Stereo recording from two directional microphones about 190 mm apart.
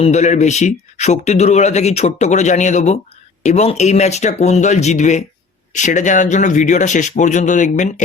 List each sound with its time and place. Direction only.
0.0 s a man's voice: 35° left (ahead or behind)